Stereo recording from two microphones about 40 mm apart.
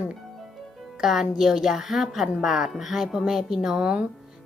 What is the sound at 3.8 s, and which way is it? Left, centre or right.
Speech, right.